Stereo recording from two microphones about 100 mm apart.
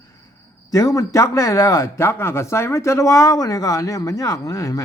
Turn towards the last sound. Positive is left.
turn(degrees=30)  # may be behind; listen again after turning